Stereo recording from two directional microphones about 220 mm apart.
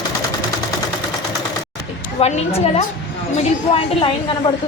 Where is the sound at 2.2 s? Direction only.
25° left (ahead or behind).